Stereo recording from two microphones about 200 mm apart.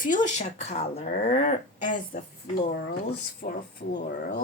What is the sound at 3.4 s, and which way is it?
Speech, 50° left (ahead or behind).